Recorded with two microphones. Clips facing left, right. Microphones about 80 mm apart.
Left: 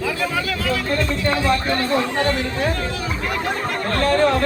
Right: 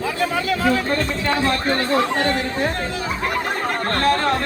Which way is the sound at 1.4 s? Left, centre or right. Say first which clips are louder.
Even; right.